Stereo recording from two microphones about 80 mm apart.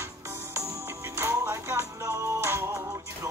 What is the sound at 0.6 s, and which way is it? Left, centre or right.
Music, right.